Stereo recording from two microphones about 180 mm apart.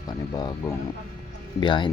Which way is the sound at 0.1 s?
25° left (ahead or behind).